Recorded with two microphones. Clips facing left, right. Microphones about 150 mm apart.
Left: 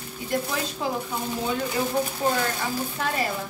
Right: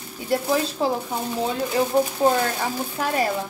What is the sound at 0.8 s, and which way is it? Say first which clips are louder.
Speech: right 4 dB; 35° right (ahead or behind).